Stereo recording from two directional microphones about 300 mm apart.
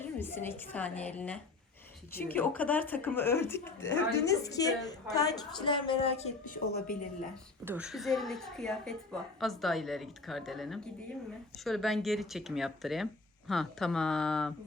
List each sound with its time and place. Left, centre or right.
0.0 s a woman's voice: centre; by 7.3 s left
7.6 s speech: centre